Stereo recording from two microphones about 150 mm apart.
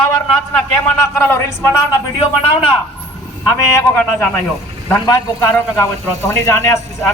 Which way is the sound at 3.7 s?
10° left (ahead or behind).